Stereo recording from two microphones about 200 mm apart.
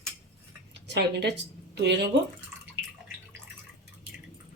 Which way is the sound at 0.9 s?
55° right (ahead or behind).